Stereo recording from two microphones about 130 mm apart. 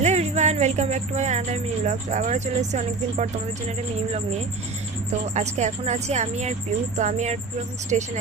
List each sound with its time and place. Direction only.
0.0 s a woman's voice: 60° right (ahead or behind)
5.2 s a woman's voice: 60° right (ahead or behind)